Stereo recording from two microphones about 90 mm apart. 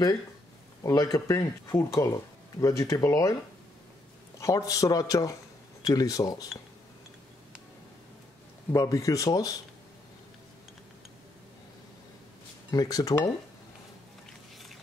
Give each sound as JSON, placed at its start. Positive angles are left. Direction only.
{"t": 0.9, "sound": "speech", "side_deg": 40}
{"t": 4.4, "sound": "speech", "side_deg": 35}
{"t": 8.7, "sound": "speech", "side_deg": 40}
{"t": 12.7, "sound": "speech", "side_deg": 45}